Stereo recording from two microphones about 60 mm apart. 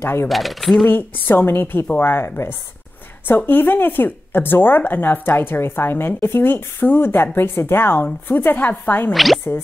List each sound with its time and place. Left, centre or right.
0.0 s speech: left
0.3 s speech: centre
0.8 s speech: left
9.1 s speech: centre